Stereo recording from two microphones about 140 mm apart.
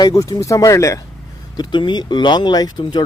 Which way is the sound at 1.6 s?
30° left (ahead or behind).